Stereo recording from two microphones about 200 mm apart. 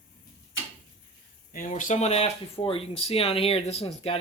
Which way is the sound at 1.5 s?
40° left (ahead or behind).